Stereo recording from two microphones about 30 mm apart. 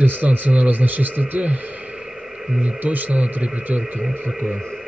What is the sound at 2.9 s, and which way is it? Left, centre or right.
Speech, right.